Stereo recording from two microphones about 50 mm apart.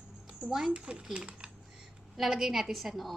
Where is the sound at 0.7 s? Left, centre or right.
Right.